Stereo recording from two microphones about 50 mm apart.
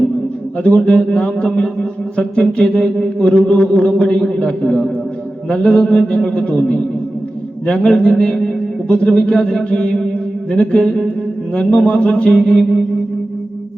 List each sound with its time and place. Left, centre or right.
0.6 s a man's voice: left